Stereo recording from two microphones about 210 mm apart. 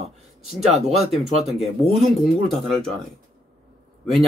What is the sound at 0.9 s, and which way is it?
Speech, 30° right (ahead or behind).